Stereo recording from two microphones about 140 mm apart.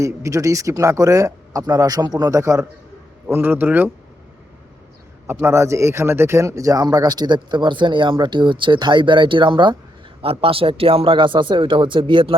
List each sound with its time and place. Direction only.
0.0 s a man's voice: 25° right (ahead or behind)
5.3 s speech: 20° right (ahead or behind); by 12.3 s 35° right (ahead or behind)